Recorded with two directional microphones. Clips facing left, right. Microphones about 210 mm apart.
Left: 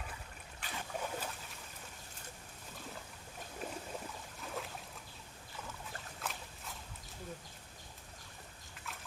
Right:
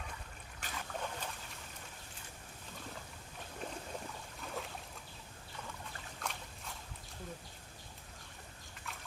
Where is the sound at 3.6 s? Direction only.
5° left (ahead or behind).